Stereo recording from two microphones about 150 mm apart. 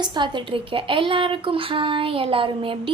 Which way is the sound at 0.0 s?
30° right (ahead or behind).